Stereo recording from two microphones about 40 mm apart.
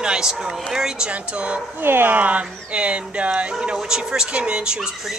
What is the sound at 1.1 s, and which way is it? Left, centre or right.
Speech, right.